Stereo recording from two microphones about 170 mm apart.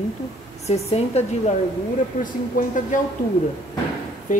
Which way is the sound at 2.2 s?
50° left (ahead or behind).